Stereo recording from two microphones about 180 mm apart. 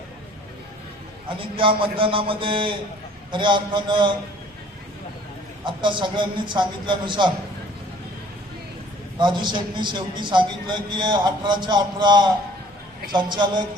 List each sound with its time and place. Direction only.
1.3 s a man's voice: 30° right (ahead or behind)
5.6 s a man's voice: 25° right (ahead or behind)
9.1 s a man's voice: 25° right (ahead or behind)